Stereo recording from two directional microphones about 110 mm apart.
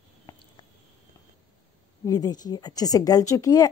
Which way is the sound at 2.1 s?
35° left (ahead or behind).